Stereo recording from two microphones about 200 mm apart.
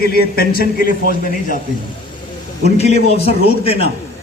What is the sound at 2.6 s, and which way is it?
A man's voice, 35° left (ahead or behind).